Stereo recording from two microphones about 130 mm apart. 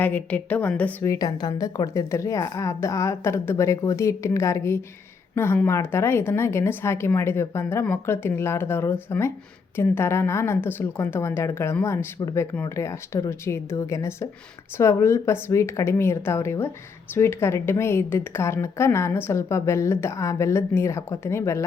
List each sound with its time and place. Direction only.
0.0 s a woman's voice: 10° left (ahead or behind)
1.0 s a woman's voice: 25° left (ahead or behind)